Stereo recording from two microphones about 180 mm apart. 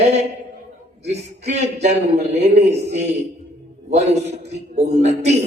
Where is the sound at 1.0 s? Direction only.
40° right (ahead or behind).